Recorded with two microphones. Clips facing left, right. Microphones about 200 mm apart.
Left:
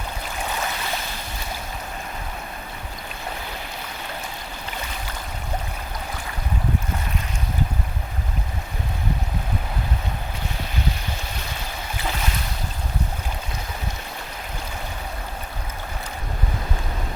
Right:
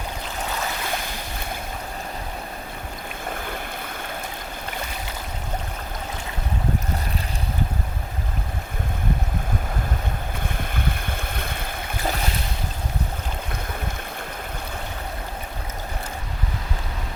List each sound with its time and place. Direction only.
10.6 s boat: 55° right (ahead or behind)